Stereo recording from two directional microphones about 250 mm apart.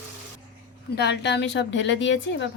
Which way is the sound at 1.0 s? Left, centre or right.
Left.